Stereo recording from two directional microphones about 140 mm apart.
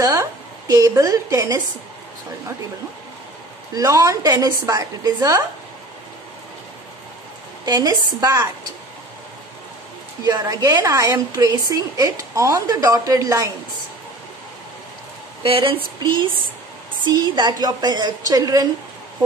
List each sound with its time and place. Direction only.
0.0 s a woman's voice: 25° right (ahead or behind)
3.7 s a woman's voice: 25° right (ahead or behind)
7.6 s a woman's voice: 30° right (ahead or behind)
10.2 s a woman's voice: 30° right (ahead or behind)
15.4 s a sound: 40° right (ahead or behind)
17.0 s a woman's voice: 30° right (ahead or behind)